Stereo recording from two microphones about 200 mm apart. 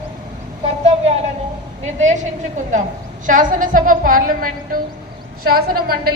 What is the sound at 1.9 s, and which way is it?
Speech, 35° right (ahead or behind).